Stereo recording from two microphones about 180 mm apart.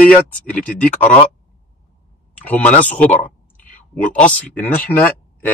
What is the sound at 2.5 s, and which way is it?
Speech, 10° left (ahead or behind).